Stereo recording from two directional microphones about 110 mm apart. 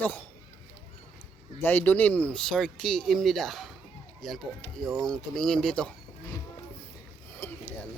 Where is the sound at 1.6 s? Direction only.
15° left (ahead or behind).